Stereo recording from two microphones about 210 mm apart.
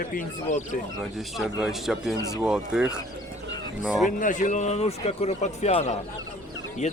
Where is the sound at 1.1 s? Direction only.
Centre (ahead or behind).